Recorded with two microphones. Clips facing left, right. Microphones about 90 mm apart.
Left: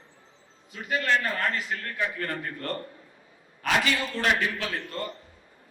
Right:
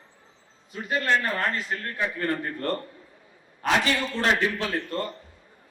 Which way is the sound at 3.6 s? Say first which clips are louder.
Right 2 dB; 30° right (ahead or behind).